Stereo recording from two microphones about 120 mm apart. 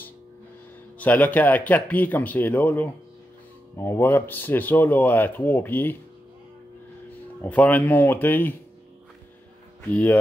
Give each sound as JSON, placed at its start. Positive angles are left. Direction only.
{"t": 0.9, "sound": "speech", "side_deg": 15}
{"t": 7.4, "sound": "speech", "side_deg": 10}
{"t": 9.8, "sound": "speech", "side_deg": 15}